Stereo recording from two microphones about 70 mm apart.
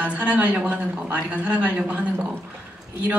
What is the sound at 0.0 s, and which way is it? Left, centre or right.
Speech, right.